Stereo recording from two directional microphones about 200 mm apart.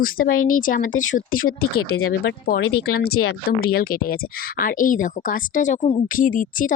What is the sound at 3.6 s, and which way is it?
Speech, 50° left (ahead or behind).